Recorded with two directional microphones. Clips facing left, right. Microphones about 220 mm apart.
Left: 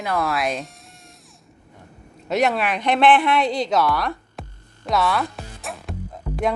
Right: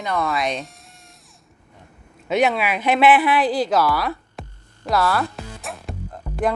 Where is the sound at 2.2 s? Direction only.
Centre (ahead or behind).